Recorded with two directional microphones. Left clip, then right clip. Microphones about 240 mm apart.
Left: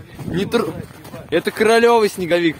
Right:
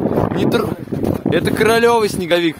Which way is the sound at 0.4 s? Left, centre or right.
Centre.